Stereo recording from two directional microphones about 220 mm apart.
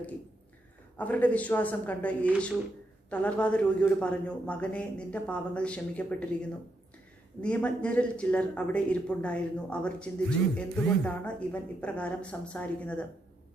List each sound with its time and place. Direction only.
0.9 s a man's voice: 5° left (ahead or behind)
7.4 s speech: 5° left (ahead or behind)